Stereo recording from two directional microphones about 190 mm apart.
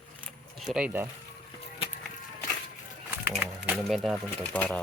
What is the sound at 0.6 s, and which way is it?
Speech, 5° right (ahead or behind).